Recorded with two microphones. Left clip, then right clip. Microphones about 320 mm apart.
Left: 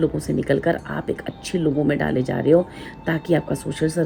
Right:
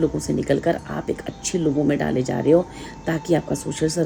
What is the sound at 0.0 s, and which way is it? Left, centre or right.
Speech, centre.